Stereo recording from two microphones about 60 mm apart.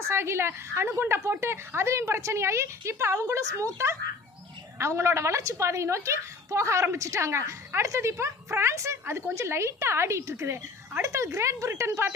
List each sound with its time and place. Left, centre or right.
0.1 s a woman's voice: right
12.0 s a woman's voice: right